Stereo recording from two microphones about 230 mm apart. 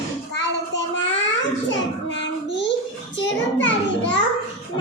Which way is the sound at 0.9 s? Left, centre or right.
Left.